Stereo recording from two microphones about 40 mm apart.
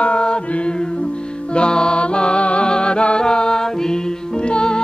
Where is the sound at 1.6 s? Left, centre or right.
Left.